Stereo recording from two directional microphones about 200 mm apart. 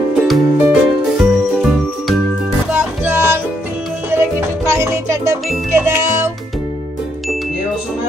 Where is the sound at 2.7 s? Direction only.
10° right (ahead or behind).